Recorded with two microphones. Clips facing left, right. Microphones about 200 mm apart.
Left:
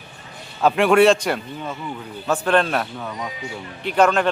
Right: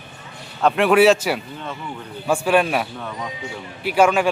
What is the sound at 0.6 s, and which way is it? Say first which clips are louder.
A man's voice: even; centre (ahead or behind).